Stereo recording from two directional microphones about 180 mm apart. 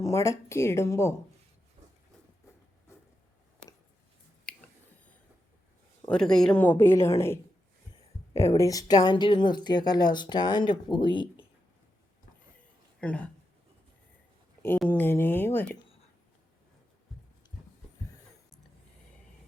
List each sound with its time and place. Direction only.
0.0 s speech: 15° left (ahead or behind)
6.1 s speech: 5° left (ahead or behind); by 11.4 s 25° left (ahead or behind)
13.0 s speech: 5° left (ahead or behind)
14.8 s speech: 10° left (ahead or behind)